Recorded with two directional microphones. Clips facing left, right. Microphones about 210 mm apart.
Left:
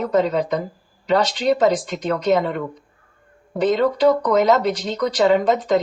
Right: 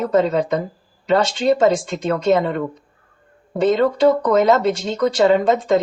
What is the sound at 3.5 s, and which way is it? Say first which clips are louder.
A woman's voice: right 2 dB; 25° right (ahead or behind).